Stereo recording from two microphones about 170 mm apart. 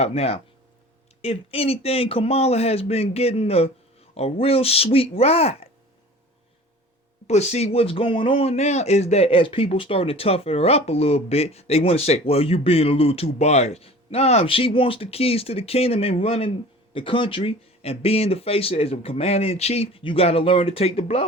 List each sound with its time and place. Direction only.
0.0 s speech: 35° left (ahead or behind)
7.3 s speech: 40° left (ahead or behind)